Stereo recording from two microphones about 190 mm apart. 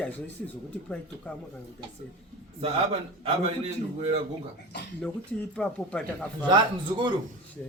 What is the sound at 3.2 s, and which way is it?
Speech, 30° right (ahead or behind).